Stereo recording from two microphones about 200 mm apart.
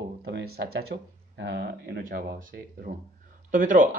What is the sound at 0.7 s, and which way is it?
Speech, 55° right (ahead or behind).